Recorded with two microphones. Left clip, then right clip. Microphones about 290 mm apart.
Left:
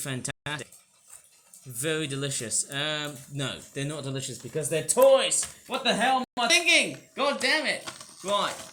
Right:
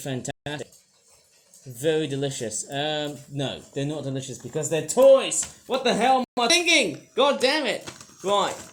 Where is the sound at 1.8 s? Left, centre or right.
Left.